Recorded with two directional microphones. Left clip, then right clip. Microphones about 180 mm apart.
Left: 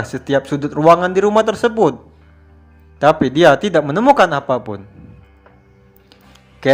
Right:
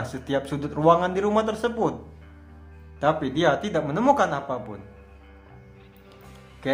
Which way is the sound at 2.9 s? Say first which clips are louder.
Left 11 dB; 35° left (ahead or behind).